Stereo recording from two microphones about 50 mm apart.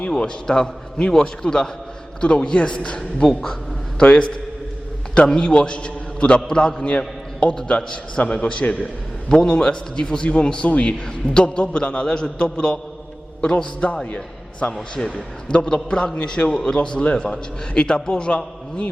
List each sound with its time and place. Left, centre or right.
0.2 s a man's voice: centre
14.7 s a man's voice: centre